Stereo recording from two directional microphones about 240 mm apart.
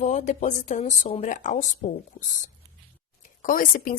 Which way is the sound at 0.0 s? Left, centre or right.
Left.